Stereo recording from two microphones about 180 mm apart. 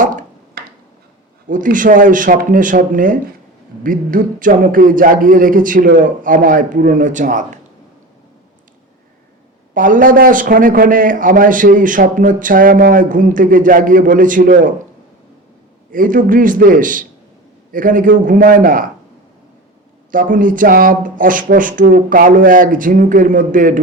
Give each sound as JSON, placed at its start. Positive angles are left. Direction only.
{"t": 0.0, "sound": "a sound", "side_deg": -45}
{"t": 1.5, "sound": "a man's voice", "side_deg": -45}
{"t": 9.7, "sound": "a man's voice", "side_deg": -50}
{"t": 15.9, "sound": "a man's voice", "side_deg": -50}
{"t": 20.1, "sound": "a man's voice", "side_deg": -50}